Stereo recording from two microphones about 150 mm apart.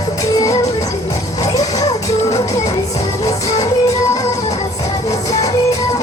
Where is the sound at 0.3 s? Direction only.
20° left (ahead or behind).